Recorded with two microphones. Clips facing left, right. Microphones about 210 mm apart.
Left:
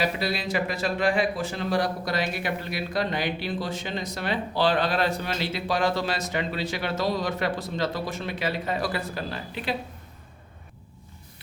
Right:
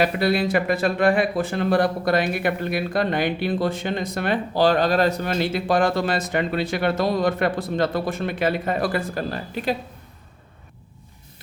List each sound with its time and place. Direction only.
0.0 s speech: 55° right (ahead or behind)